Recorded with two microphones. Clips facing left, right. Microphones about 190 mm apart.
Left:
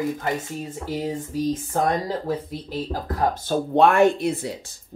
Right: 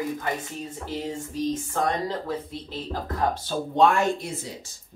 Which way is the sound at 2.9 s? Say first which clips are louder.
Left 1 dB; 40° left (ahead or behind).